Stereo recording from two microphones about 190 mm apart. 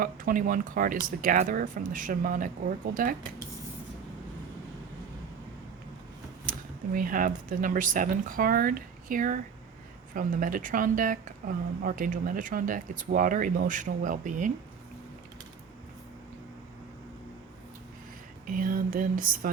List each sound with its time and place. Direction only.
0.0 s speech: 45° right (ahead or behind)
6.4 s speech: 45° right (ahead or behind)
18.4 s speech: 45° right (ahead or behind)